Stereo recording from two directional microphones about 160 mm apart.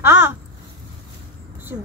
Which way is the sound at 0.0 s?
15° right (ahead or behind).